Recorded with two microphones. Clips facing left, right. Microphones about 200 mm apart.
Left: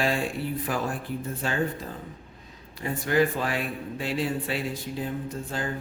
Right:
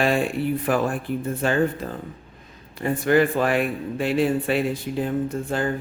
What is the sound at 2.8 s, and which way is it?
A man's voice, 60° right (ahead or behind).